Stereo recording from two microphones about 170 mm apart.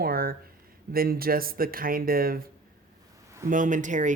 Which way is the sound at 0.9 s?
60° right (ahead or behind).